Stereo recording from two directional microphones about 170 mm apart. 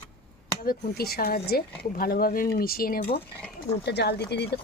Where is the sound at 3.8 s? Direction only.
75° left (ahead or behind).